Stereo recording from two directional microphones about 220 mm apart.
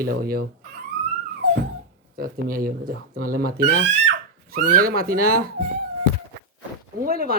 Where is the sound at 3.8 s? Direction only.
55° right (ahead or behind).